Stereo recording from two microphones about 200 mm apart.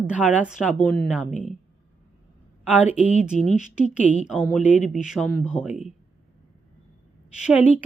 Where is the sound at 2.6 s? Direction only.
10° right (ahead or behind).